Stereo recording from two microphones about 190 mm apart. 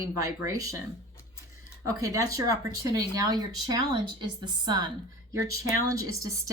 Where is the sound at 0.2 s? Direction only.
15° right (ahead or behind).